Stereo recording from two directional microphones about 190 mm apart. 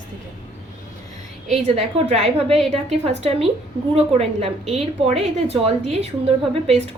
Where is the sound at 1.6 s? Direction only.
35° right (ahead or behind).